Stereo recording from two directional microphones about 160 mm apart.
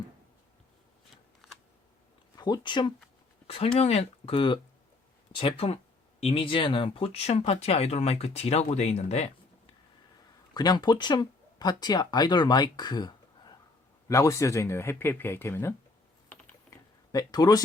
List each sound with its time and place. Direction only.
2.3 s speech: 25° left (ahead or behind); by 9.3 s 40° left (ahead or behind)
10.5 s speech: 25° left (ahead or behind)
16.3 s typing: 20° left (ahead or behind)